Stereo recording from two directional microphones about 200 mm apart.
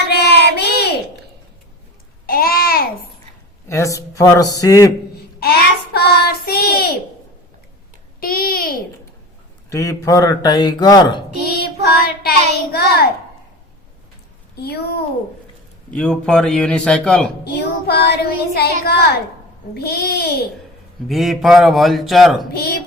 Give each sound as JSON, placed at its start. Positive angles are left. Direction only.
{"t": 0.1, "sound": "child singing", "side_deg": 55}
{"t": 2.2, "sound": "babbling", "side_deg": 45}
{"t": 3.7, "sound": "speech", "side_deg": 15}
{"t": 5.4, "sound": "child singing", "side_deg": 50}
{"t": 8.2, "sound": "a sound", "side_deg": 45}
{"t": 9.7, "sound": "speech", "side_deg": 15}
{"t": 11.4, "sound": "child singing", "side_deg": 50}
{"t": 12.7, "sound": "a sound", "side_deg": 50}
{"t": 14.5, "sound": "a child's voice", "side_deg": 55}
{"t": 15.9, "sound": "a man's voice", "side_deg": 5}
{"t": 17.4, "sound": "speech", "side_deg": 50}
{"t": 21.1, "sound": "a man's voice", "side_deg": 0}
{"t": 22.5, "sound": "speech", "side_deg": 50}